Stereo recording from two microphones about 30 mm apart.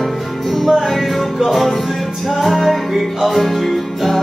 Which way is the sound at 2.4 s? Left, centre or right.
Centre.